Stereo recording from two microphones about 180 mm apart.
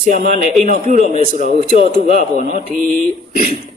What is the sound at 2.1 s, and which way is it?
Speech, 45° right (ahead or behind).